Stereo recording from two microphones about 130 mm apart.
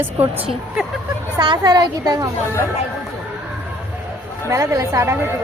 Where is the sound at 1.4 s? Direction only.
35° right (ahead or behind).